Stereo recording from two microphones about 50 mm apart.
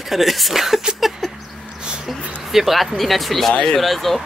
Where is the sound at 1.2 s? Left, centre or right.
Centre.